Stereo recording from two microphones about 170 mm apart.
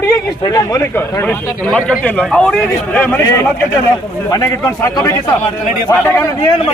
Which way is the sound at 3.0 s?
15° left (ahead or behind).